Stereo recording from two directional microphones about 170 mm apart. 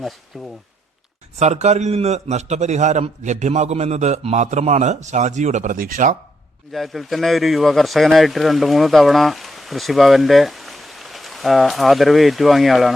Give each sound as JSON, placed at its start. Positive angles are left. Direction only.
{"t": 0.0, "sound": "speech", "side_deg": 0}
{"t": 1.4, "sound": "a man's voice", "side_deg": -40}
{"t": 6.7, "sound": "speech", "side_deg": 0}